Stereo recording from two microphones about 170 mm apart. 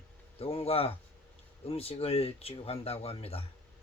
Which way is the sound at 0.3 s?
35° left (ahead or behind).